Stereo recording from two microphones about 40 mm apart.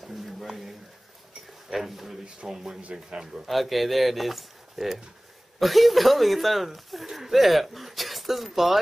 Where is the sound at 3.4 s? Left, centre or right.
Centre.